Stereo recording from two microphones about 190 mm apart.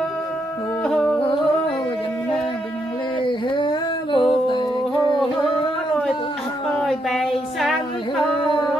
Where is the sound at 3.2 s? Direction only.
25° left (ahead or behind).